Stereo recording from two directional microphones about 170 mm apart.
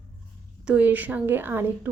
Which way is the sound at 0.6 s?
10° right (ahead or behind).